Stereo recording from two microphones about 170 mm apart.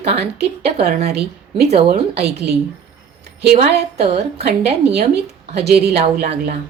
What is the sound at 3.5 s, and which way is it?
A woman's voice, 40° right (ahead or behind).